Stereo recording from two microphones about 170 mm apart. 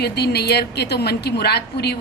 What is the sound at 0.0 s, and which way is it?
A woman's voice, 70° left (ahead or behind).